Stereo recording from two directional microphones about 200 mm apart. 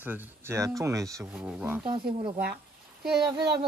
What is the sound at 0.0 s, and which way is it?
Speech, 10° right (ahead or behind).